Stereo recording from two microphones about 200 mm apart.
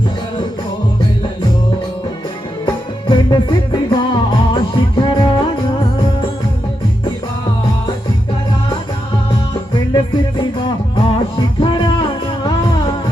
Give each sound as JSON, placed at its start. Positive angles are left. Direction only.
{"t": 3.1, "sound": "music", "side_deg": 25}
{"t": 9.7, "sound": "music", "side_deg": 25}